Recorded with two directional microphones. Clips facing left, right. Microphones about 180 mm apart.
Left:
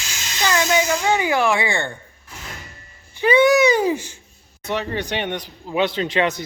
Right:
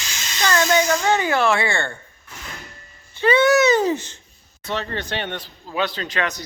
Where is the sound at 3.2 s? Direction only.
15° left (ahead or behind).